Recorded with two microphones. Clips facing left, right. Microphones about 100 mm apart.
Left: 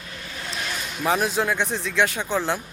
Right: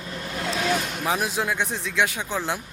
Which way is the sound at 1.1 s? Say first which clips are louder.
Left 4 dB; 5° right (ahead or behind).